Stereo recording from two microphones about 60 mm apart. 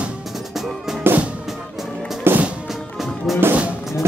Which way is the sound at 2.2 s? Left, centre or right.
Right.